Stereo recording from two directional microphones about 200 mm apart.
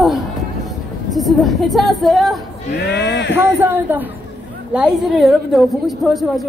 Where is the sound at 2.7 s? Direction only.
55° left (ahead or behind).